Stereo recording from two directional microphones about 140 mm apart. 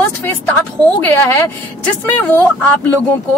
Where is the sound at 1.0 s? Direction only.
15° left (ahead or behind).